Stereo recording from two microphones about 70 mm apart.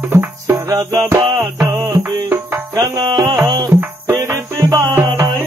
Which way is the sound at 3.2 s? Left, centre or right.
Right.